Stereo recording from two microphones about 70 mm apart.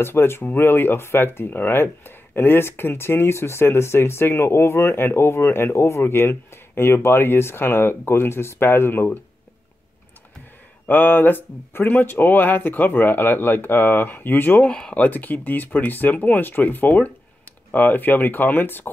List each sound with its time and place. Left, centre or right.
0.0 s speech: left
10.9 s speech: left
14.7 s speech: centre
15.0 s speech: left